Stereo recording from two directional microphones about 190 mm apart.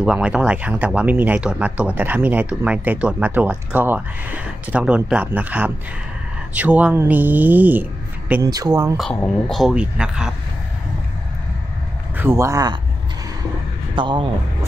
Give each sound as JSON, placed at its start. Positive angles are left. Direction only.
{"t": 0.0, "sound": "speech", "side_deg": -5}
{"t": 8.3, "sound": "speech", "side_deg": -20}
{"t": 9.1, "sound": "speech", "side_deg": 0}
{"t": 12.2, "sound": "speech", "side_deg": -15}
{"t": 13.9, "sound": "speech", "side_deg": -25}